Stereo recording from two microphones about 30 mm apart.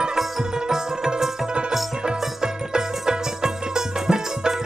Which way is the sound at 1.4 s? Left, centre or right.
Right.